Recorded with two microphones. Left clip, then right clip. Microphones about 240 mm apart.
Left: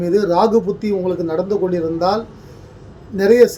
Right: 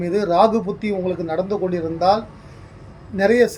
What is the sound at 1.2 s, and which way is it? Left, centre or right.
Speech, centre.